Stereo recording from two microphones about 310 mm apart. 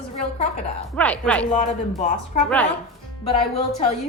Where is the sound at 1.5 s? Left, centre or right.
Left.